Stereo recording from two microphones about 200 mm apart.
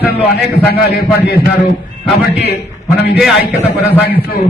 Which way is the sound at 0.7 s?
50° left (ahead or behind).